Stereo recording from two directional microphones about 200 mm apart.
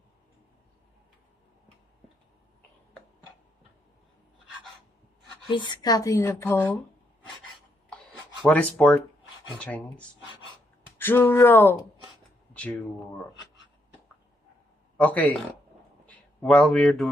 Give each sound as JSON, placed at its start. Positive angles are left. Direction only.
{"t": 5.5, "sound": "speech", "side_deg": 20}
{"t": 7.9, "sound": "rub", "side_deg": 5}
{"t": 8.5, "sound": "speech", "side_deg": 5}
{"t": 15.0, "sound": "speech", "side_deg": 10}